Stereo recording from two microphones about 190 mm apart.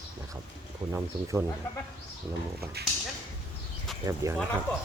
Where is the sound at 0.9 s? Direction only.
15° right (ahead or behind).